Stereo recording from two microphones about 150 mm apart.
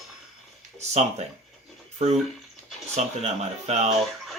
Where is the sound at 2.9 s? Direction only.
45° right (ahead or behind).